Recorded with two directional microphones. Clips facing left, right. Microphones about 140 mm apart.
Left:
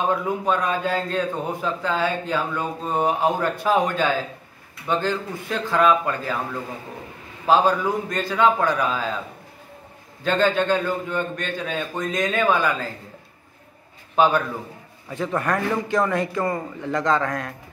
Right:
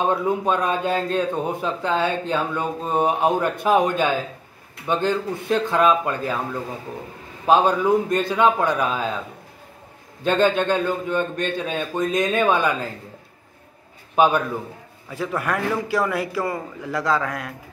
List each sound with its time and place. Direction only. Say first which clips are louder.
0.1 s a man's voice: right 1 dB; 25° right (ahead or behind)
7.4 s a man's voice: right 2 dB; 20° right (ahead or behind)
10.2 s a man's voice: right 1 dB; 20° right (ahead or behind)
14.1 s a man's voice: right 1 dB; 15° right (ahead or behind)
15.0 s a man's voice: left 1 dB; 5° right (ahead or behind)